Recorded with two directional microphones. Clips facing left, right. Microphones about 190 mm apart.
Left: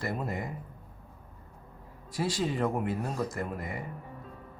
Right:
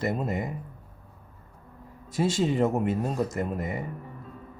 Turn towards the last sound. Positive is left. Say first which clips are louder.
# right 5 dB
turn(degrees=-20)  # may be behind; listen again after turning